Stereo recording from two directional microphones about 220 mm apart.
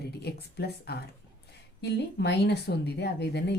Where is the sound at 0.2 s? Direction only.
45° left (ahead or behind).